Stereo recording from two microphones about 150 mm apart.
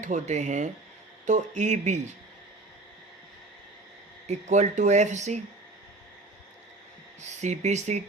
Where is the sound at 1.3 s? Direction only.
55° right (ahead or behind).